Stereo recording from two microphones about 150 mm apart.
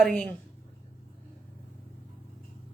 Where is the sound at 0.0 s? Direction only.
5° left (ahead or behind).